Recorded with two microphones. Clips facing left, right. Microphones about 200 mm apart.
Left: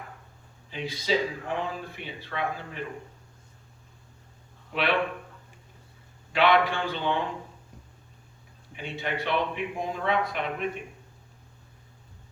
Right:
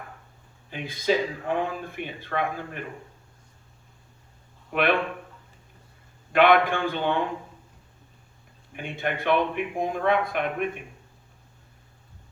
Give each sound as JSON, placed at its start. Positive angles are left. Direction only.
{"t": 0.7, "sound": "speech", "side_deg": -50}
{"t": 4.7, "sound": "speech", "side_deg": -50}
{"t": 6.3, "sound": "speech", "side_deg": -50}
{"t": 8.7, "sound": "speech", "side_deg": -50}